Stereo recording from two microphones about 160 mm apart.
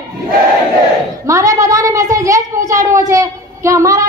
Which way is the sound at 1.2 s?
20° right (ahead or behind).